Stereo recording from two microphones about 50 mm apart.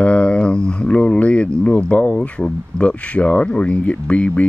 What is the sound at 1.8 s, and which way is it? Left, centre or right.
Speech, left.